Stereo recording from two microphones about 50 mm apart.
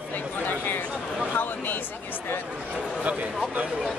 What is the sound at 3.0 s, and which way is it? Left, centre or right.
Speech, right.